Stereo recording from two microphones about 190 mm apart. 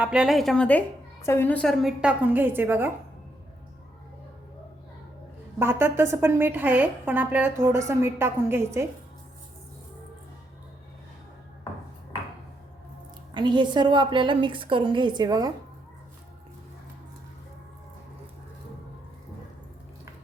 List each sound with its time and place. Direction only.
0.0 s a woman's voice: 5° right (ahead or behind)
5.5 s a woman's voice: 10° right (ahead or behind)
13.3 s a woman's voice: 25° right (ahead or behind)